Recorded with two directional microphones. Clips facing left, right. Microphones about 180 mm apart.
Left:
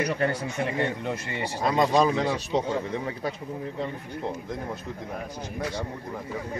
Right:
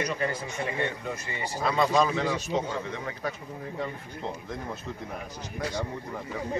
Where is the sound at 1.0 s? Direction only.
70° left (ahead or behind).